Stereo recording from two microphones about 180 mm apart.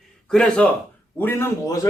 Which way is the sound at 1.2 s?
10° left (ahead or behind).